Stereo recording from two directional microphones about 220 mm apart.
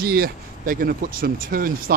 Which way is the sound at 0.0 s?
45° right (ahead or behind).